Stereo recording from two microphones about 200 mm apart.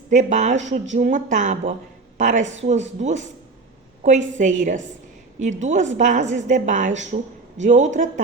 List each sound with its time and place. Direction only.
0.1 s a woman's voice: 40° right (ahead or behind)